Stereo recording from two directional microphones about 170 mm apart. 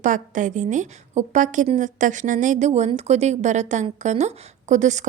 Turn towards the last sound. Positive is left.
turn(degrees=-45)  # may be behind; listen again after turning